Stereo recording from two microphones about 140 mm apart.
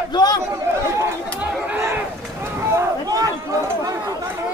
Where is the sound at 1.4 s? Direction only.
15° right (ahead or behind).